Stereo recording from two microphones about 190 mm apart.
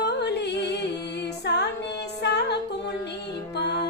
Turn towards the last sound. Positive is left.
turn(degrees=60)  # may be behind; listen again after turning